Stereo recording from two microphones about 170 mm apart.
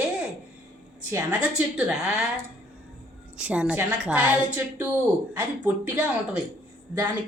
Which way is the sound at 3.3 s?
5° right (ahead or behind).